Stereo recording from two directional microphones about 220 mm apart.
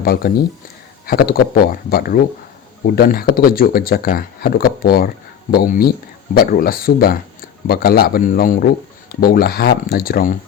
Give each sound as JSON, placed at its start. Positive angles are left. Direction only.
{"t": 0.0, "sound": "speech", "side_deg": 45}